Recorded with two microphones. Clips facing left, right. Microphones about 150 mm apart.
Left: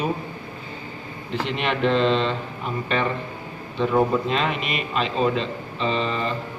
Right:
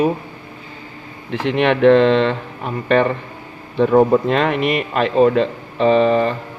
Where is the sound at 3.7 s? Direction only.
55° right (ahead or behind).